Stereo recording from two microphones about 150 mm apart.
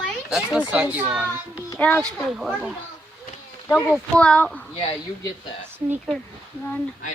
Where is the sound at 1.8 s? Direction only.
10° left (ahead or behind).